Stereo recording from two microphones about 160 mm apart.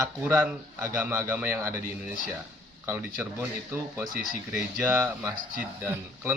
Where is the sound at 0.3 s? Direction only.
10° right (ahead or behind).